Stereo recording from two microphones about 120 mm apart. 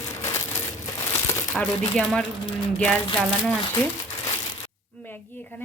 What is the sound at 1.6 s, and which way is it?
Speech, centre (ahead or behind).